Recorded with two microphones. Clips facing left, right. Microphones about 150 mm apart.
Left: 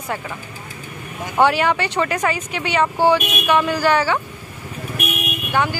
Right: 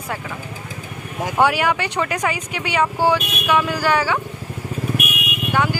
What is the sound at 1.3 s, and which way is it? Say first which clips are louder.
Speech: left 2 dB; 10° right (ahead or behind).